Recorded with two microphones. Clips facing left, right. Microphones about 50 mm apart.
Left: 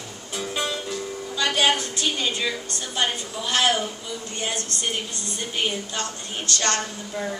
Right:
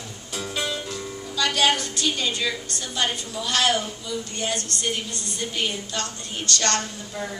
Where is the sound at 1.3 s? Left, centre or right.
Left.